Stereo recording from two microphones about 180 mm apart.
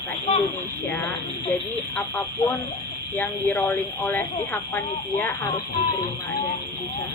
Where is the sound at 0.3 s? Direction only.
35° left (ahead or behind).